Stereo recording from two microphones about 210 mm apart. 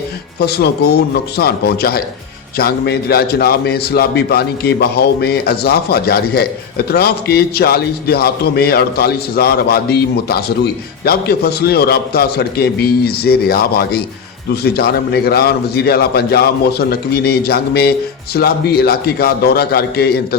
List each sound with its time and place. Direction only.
0.3 s a man's voice: 50° left (ahead or behind)